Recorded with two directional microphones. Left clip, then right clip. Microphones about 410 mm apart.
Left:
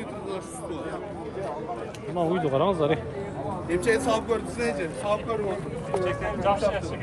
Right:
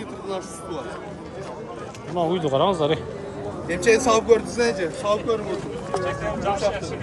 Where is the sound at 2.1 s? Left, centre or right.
Centre.